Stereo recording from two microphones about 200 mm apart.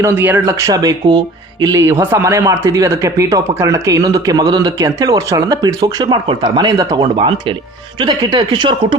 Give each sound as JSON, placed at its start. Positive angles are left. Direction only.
{"t": 0.0, "sound": "speech", "side_deg": -10}